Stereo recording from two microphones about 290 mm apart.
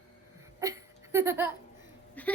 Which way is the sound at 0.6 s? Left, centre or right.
Centre.